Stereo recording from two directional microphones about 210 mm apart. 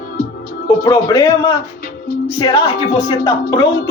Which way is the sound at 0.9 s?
20° left (ahead or behind).